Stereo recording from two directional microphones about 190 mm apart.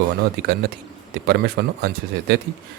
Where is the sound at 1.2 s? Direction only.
55° right (ahead or behind).